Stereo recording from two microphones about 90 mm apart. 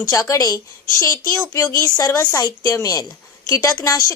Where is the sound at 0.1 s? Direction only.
40° left (ahead or behind).